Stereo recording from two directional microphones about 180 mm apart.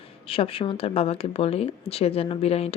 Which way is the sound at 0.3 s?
30° left (ahead or behind).